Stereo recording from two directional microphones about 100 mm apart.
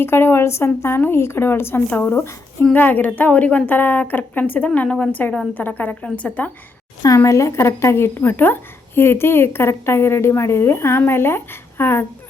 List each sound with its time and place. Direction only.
0.0 s a woman's voice: 25° left (ahead or behind)
7.2 s a woman's voice: 30° left (ahead or behind)